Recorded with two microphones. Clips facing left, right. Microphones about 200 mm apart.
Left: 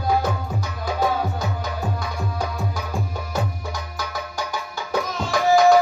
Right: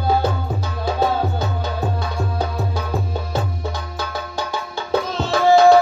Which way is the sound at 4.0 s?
30° right (ahead or behind).